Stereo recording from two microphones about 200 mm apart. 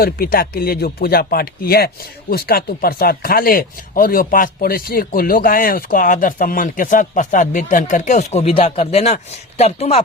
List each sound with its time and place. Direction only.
0.0 s speech: 45° left (ahead or behind); by 10.0 s 30° left (ahead or behind)